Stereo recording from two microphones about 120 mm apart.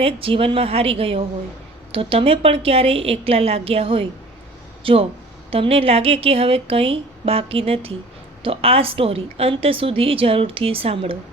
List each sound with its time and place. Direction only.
0.0 s a woman's voice: 50° right (ahead or behind)